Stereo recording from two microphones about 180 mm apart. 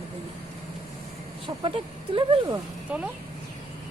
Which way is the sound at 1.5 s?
25° right (ahead or behind).